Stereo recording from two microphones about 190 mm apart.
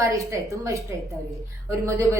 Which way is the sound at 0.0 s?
15° right (ahead or behind).